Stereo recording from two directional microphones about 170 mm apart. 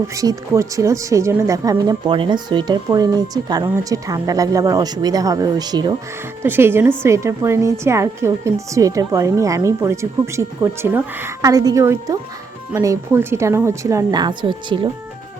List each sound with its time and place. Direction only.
0.1 s speech: 20° right (ahead or behind)
6.4 s a woman's voice: 15° right (ahead or behind); by 14.8 s 30° right (ahead or behind)